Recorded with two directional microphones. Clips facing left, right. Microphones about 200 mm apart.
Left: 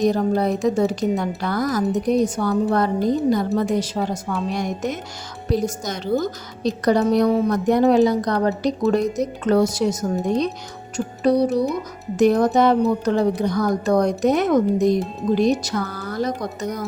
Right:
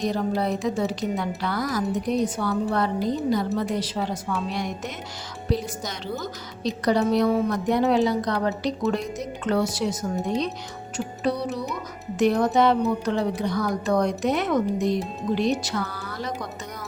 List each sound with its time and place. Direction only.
0.0 s a woman's voice: 45° left (ahead or behind)